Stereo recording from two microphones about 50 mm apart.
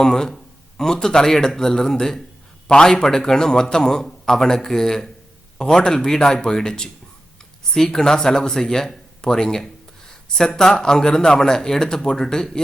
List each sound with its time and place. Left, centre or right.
0.0 s a man's voice: centre